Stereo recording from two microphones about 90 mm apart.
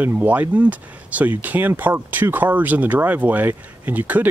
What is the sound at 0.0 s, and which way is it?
Speech, 20° right (ahead or behind).